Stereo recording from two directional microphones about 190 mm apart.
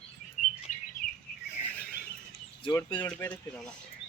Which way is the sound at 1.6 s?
10° left (ahead or behind).